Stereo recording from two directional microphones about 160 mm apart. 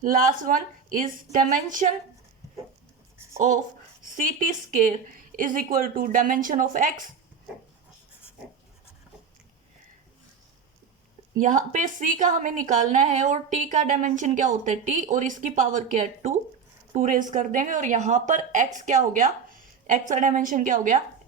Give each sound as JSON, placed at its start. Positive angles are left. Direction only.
{"t": 0.0, "sound": "a woman's voice", "side_deg": -60}
{"t": 4.2, "sound": "a woman's voice", "side_deg": -55}
{"t": 11.3, "sound": "a woman's voice", "side_deg": -50}